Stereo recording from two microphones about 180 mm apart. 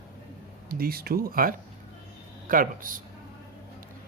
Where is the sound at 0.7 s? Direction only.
55° right (ahead or behind).